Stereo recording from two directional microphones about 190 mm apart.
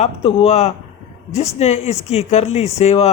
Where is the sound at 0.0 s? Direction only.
30° left (ahead or behind).